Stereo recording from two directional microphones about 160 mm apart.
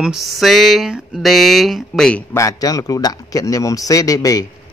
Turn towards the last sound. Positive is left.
turn(degrees=20)  # may be behind; listen again after turning